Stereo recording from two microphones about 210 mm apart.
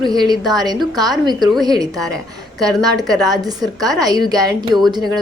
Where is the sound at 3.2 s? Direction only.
20° right (ahead or behind).